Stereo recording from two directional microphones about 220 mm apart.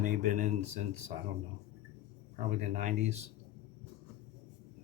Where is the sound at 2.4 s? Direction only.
35° right (ahead or behind).